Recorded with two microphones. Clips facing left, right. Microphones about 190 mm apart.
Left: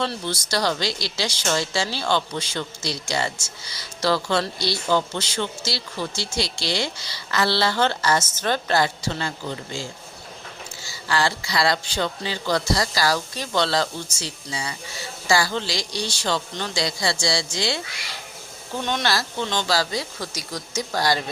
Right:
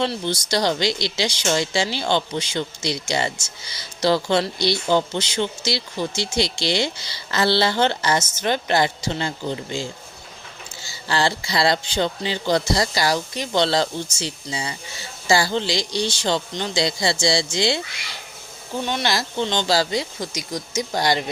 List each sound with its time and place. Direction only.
0.0 s speech: 20° right (ahead or behind)
10.8 s speech: 25° right (ahead or behind)
18.9 s speech: 10° right (ahead or behind)
19.4 s speech: 25° right (ahead or behind)